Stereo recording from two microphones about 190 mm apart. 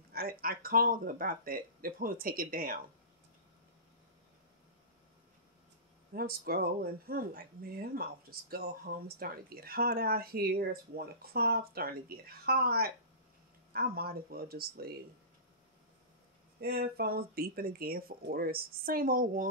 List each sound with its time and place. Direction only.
0.1 s speech: 50° right (ahead or behind)
6.1 s speech: 55° right (ahead or behind)
16.6 s speech: 55° right (ahead or behind)